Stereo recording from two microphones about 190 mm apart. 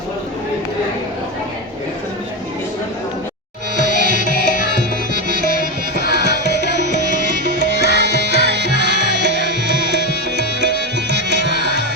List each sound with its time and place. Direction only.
3.8 s music: 40° left (ahead or behind)
4.8 s music: 55° right (ahead or behind)
6.0 s tabla: 60° left (ahead or behind)
7.4 s music: 55° right (ahead or behind)
7.8 s music: 65° left (ahead or behind)
8.8 s music: 60° right (ahead or behind)